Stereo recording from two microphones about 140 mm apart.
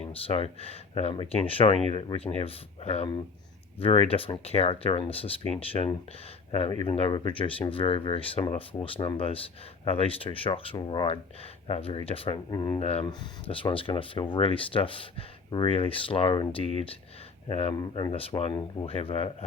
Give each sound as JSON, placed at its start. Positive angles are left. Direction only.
{"t": 0.1, "sound": "speech", "side_deg": 45}
{"t": 12.5, "sound": "speech", "side_deg": 30}
{"t": 12.8, "sound": "speech", "side_deg": 50}
{"t": 13.1, "sound": "speech", "side_deg": 35}
{"t": 17.5, "sound": "speech", "side_deg": 50}
{"t": 17.7, "sound": "speech", "side_deg": 35}
{"t": 18.1, "sound": "speech", "side_deg": 45}